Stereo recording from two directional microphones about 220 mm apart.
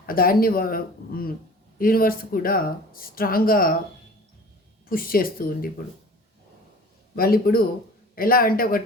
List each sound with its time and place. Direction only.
0.0 s speech: 40° left (ahead or behind)
4.9 s speech: 40° left (ahead or behind)
7.2 s speech: 45° left (ahead or behind)